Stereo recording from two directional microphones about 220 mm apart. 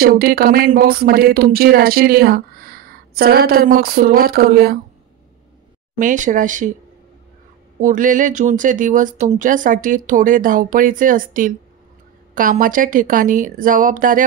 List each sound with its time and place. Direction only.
0.0 s speech: 40° right (ahead or behind)
5.9 s speech: 35° right (ahead or behind)
7.8 s speech: 35° right (ahead or behind)